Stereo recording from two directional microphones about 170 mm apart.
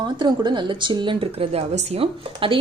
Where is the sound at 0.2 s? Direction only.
25° right (ahead or behind).